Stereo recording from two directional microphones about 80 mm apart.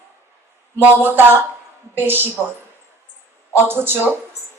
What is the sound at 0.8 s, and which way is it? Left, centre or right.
Speech, right.